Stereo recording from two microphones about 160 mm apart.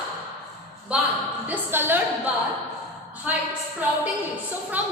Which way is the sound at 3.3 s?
10° right (ahead or behind).